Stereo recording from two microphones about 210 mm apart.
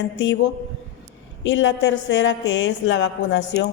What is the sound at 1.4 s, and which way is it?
Speech, 65° left (ahead or behind).